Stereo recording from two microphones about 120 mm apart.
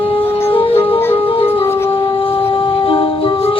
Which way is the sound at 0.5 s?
50° left (ahead or behind).